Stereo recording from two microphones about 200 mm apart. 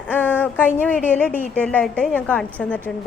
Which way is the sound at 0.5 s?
10° left (ahead or behind).